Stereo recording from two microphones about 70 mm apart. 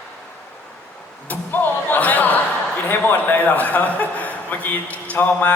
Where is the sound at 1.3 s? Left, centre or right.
Left.